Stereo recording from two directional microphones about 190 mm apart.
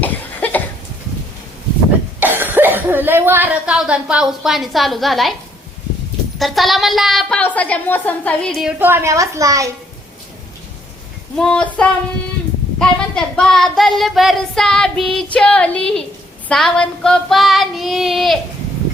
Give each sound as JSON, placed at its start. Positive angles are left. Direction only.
{"t": 0.0, "sound": "a sound", "side_deg": 10}
{"t": 2.2, "sound": "cough", "side_deg": -10}
{"t": 6.4, "sound": "child singing", "side_deg": 0}
{"t": 8.8, "sound": "a woman's voice", "side_deg": -10}
{"t": 11.3, "sound": "child singing", "side_deg": 5}